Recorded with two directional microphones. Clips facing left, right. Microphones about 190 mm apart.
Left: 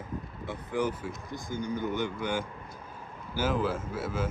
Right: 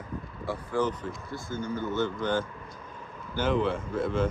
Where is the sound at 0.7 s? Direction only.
15° left (ahead or behind).